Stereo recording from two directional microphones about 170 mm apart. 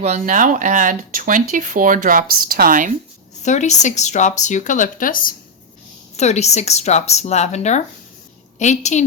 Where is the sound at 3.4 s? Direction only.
45° left (ahead or behind).